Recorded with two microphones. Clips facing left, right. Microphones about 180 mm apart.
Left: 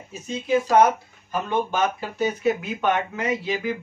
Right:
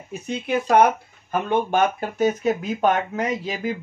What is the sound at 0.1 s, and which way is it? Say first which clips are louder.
Speech: left 2 dB; 60° right (ahead or behind).